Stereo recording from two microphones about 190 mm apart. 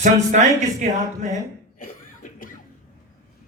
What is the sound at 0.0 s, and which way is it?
Speech, 40° right (ahead or behind).